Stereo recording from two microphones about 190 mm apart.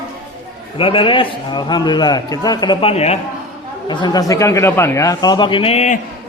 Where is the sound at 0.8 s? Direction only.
30° left (ahead or behind).